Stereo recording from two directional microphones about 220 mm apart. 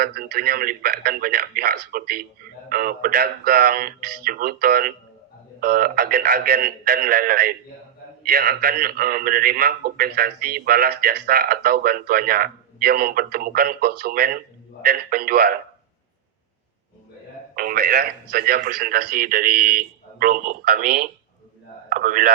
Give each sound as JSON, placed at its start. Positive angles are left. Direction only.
{"t": 0.0, "sound": "a man's voice", "side_deg": -45}
{"t": 17.5, "sound": "speech", "side_deg": -40}
{"t": 21.8, "sound": "a sound", "side_deg": -40}